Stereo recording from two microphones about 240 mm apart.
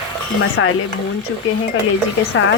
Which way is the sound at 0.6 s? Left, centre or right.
Left.